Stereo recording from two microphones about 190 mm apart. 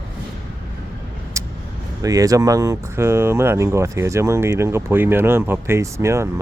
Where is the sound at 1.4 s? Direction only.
15° right (ahead or behind).